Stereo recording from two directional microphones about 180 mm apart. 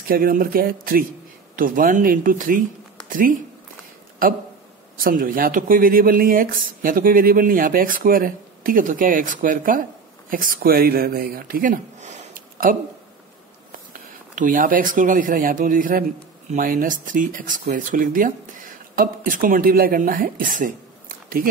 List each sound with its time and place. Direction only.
0.1 s speech: 50° right (ahead or behind)
5.0 s speech: 50° right (ahead or behind)